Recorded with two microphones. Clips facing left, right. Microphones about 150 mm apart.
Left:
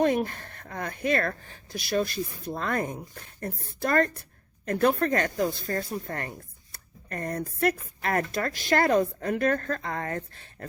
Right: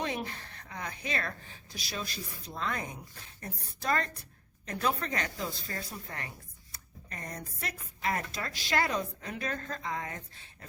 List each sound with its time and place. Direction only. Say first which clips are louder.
0.0 s a woman's voice: left 11 dB; 50° left (ahead or behind)